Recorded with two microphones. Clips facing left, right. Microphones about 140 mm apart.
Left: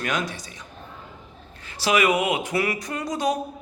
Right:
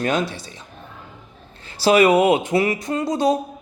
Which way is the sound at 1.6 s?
30° right (ahead or behind).